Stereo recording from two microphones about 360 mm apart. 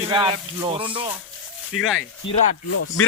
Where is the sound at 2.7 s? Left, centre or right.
Left.